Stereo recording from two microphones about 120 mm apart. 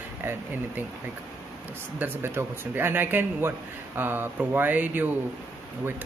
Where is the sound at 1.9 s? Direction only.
15° right (ahead or behind).